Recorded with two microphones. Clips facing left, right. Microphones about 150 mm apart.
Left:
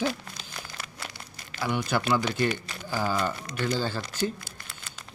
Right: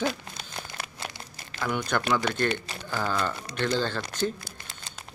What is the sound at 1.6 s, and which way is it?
Speech, 5° left (ahead or behind).